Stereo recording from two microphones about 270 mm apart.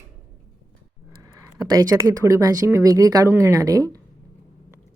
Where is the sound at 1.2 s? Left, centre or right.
Centre.